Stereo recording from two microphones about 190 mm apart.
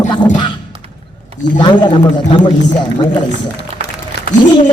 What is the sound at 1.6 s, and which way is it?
Speech, 25° left (ahead or behind).